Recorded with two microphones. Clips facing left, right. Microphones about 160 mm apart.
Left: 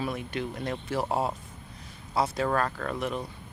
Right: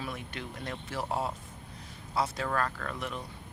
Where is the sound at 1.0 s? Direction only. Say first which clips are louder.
Left 4 dB; 40° left (ahead or behind).